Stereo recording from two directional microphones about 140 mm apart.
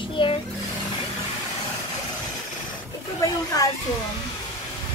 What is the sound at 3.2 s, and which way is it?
Speech, 25° left (ahead or behind).